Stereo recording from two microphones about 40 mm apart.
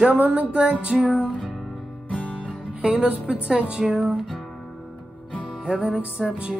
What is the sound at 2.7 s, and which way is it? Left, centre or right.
Music, right.